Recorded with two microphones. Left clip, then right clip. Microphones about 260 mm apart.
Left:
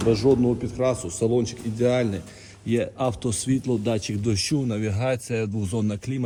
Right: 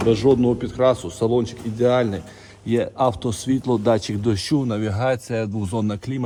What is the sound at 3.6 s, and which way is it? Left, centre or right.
Speech, centre.